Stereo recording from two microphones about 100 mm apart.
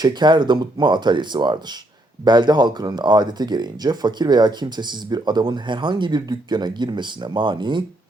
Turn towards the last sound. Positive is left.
turn(degrees=-50)  # may be behind; listen again after turning